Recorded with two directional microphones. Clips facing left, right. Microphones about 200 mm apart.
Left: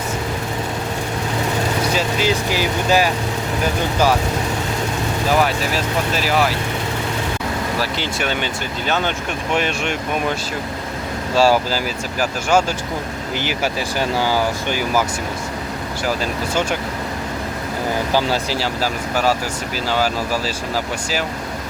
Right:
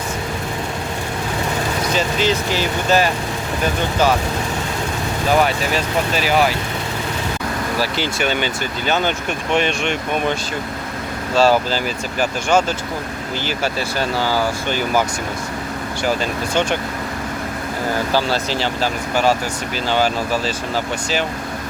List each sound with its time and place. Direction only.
2.0 s speech: 10° left (ahead or behind)
5.4 s speech: centre (ahead or behind)
7.8 s speech: centre (ahead or behind)
11.3 s speech: 10° left (ahead or behind)
14.0 s speech: 15° left (ahead or behind)
18.1 s speech: 10° left (ahead or behind)